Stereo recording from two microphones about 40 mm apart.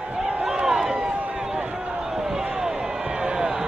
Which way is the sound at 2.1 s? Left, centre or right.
Centre.